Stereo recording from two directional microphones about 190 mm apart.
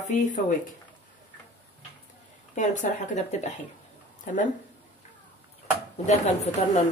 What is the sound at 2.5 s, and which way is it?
A woman's voice, 40° left (ahead or behind).